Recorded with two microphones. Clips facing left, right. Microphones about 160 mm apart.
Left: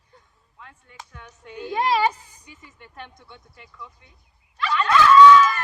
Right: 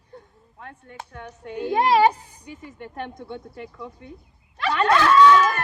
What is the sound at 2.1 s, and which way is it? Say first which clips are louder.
Speech: right 7 dB; 35° right (ahead or behind).